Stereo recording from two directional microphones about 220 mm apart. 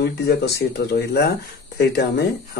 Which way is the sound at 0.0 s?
45° left (ahead or behind).